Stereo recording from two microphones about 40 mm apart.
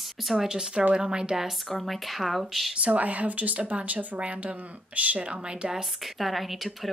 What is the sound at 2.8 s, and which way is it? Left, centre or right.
A woman's voice, right.